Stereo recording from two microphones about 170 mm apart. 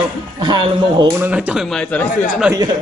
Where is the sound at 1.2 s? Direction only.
10° right (ahead or behind).